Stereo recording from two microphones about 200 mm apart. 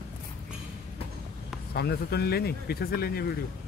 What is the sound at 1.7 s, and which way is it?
Speech, 50° left (ahead or behind).